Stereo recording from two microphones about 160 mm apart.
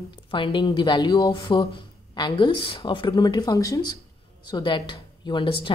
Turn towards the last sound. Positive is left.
turn(degrees=30)  # may be behind; listen again after turning